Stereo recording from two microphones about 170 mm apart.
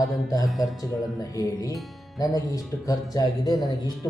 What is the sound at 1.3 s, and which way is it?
Speech, 20° left (ahead or behind).